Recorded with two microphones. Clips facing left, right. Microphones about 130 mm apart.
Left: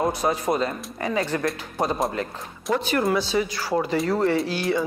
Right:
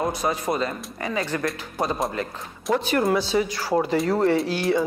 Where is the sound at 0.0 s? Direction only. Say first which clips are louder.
Left 2 dB; 20° left (ahead or behind).